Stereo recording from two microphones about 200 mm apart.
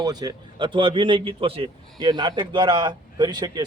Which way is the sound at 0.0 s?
20° right (ahead or behind).